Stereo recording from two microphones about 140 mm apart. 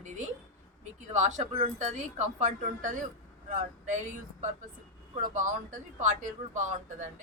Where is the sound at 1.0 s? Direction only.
60° right (ahead or behind).